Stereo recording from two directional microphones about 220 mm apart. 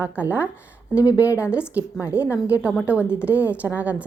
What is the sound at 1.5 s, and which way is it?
Speech, 5° right (ahead or behind).